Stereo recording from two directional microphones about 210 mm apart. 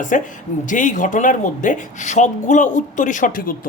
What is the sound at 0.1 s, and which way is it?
Speech, 40° left (ahead or behind).